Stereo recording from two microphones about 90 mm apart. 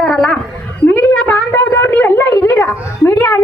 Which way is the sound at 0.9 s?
25° left (ahead or behind).